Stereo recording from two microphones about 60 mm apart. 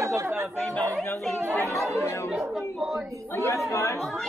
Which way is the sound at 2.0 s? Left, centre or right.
Left.